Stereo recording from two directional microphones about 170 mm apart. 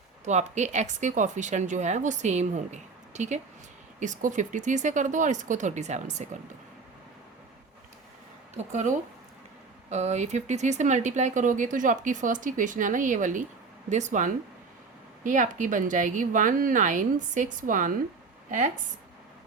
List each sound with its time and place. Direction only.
0.3 s speech: 40° right (ahead or behind)
8.5 s speech: 45° right (ahead or behind)